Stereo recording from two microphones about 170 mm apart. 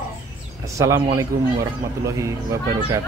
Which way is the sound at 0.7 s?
20° right (ahead or behind).